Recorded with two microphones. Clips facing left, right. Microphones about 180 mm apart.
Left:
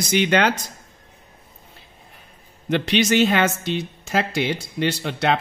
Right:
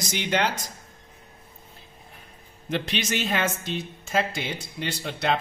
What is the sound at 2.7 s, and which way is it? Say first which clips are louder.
Speech: left 8 dB; 75° left (ahead or behind).